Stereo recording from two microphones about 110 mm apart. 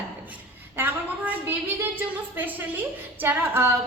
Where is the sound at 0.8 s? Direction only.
15° right (ahead or behind).